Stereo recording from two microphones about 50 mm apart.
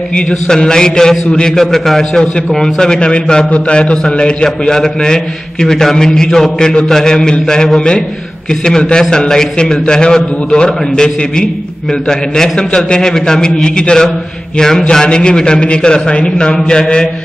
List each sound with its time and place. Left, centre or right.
0.3 s a man's voice: centre
16.5 s a man's voice: centre